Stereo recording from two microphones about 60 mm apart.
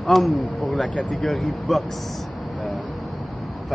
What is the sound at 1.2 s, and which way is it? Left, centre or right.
Speech, centre.